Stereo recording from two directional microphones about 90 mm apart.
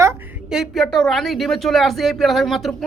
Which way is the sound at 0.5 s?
Centre (ahead or behind).